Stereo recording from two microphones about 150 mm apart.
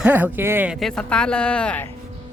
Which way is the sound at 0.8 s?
5° left (ahead or behind).